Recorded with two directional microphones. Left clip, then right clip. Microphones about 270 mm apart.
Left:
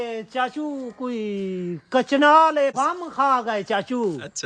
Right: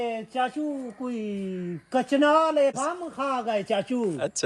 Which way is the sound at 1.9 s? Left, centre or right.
Centre.